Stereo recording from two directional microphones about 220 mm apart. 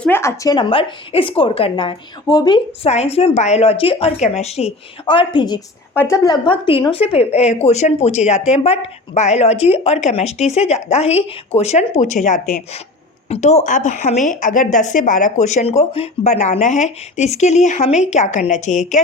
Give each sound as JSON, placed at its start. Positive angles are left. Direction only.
{"t": 0.0, "sound": "speech", "side_deg": 10}